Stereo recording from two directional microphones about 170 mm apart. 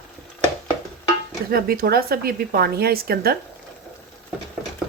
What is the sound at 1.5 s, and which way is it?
Speech, 60° right (ahead or behind).